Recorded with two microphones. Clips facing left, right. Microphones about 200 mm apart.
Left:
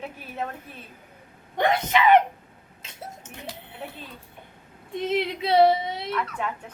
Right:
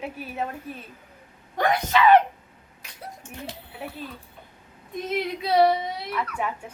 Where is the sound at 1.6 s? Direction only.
25° left (ahead or behind).